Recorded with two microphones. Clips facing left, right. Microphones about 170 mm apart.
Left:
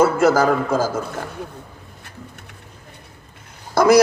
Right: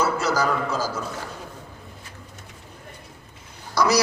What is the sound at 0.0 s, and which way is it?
A man's voice, 50° left (ahead or behind).